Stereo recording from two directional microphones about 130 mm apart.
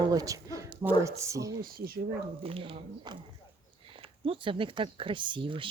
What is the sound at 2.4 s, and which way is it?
Speech, 45° right (ahead or behind).